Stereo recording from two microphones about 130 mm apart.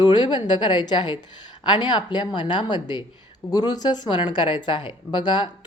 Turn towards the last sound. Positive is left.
turn(degrees=35)  # may be behind; listen again after turning